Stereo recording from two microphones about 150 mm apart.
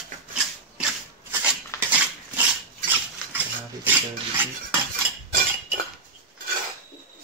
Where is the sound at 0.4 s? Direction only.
Centre (ahead or behind).